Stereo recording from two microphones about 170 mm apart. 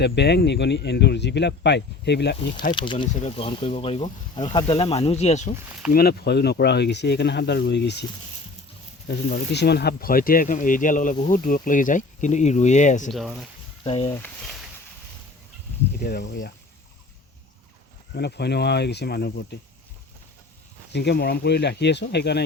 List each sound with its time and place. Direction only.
0.0 s speech: 80° left
2.5 s speech: 50° left (ahead or behind)
2.7 s speech: 30° left (ahead or behind)
5.9 s speech: 65° left (ahead or behind); by 8.0 s 90° left
9.0 s speech: 80° left; by 13.1 s 45° left (ahead or behind)
13.1 s speech: centre (ahead or behind)
13.8 s speech: 35° left (ahead or behind)
14.2 s a sound: centre (ahead or behind)
16.0 s speech: 65° left (ahead or behind)
18.1 s speech: 75° left (ahead or behind)
20.9 s speech: 80° left